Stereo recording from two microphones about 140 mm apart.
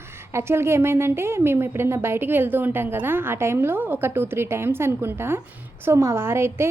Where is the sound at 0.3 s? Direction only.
20° right (ahead or behind).